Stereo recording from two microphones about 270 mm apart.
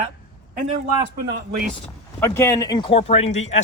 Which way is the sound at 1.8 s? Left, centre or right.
Centre.